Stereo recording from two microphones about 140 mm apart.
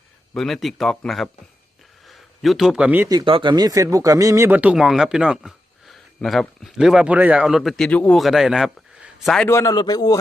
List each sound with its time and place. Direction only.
0.3 s speech: centre (ahead or behind)
3.1 s speech: 35° right (ahead or behind); by 9.5 s centre (ahead or behind)
9.5 s speech: 20° left (ahead or behind)